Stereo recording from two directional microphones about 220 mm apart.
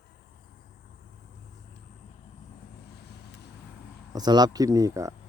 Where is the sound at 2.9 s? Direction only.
50° left (ahead or behind).